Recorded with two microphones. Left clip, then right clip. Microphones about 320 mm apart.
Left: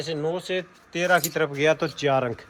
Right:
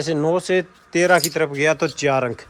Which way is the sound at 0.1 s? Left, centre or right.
Centre.